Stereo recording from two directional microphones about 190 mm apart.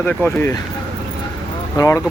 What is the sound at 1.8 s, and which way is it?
Speech, 15° left (ahead or behind).